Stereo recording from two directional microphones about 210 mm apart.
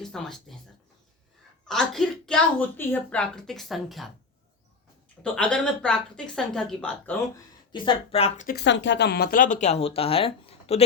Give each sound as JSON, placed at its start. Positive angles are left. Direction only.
{"t": 0.0, "sound": "a woman's voice", "side_deg": 0}
{"t": 1.6, "sound": "a woman's voice", "side_deg": 0}
{"t": 5.2, "sound": "a woman's voice", "side_deg": 5}
{"t": 7.7, "sound": "speech", "side_deg": 25}
{"t": 8.4, "sound": "speech", "side_deg": 55}